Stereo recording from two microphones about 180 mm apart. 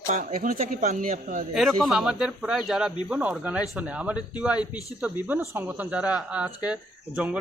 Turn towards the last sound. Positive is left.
turn(degrees=-5)  # may be behind; listen again after turning